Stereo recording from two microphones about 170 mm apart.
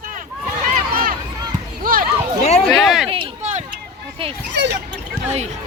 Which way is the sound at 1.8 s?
55° right (ahead or behind).